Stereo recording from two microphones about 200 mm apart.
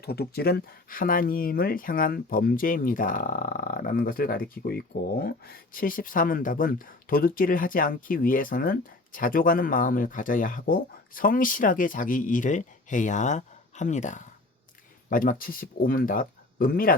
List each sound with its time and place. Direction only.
0.0 s speech: 50° left (ahead or behind)